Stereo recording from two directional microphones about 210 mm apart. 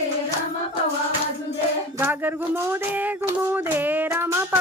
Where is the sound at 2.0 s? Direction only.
10° right (ahead or behind).